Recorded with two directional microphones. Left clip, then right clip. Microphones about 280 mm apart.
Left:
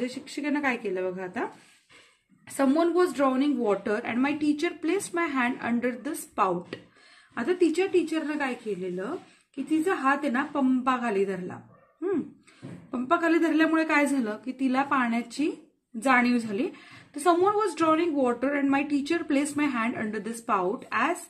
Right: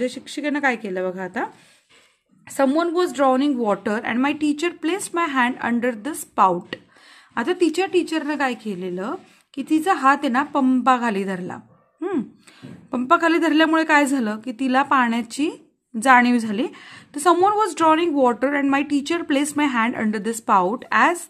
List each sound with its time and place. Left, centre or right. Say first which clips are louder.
0.0 s a woman's voice: right 7 dB; right